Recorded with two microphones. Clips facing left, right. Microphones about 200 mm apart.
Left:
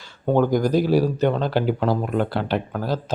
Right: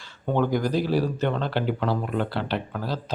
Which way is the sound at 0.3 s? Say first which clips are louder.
Left 5 dB; 45° left (ahead or behind).